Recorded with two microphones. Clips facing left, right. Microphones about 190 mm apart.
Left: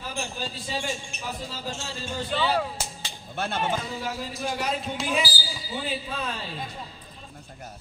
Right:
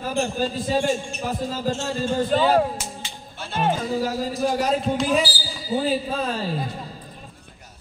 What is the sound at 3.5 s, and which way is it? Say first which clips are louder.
Speech: right 7 dB; 55° right (ahead or behind).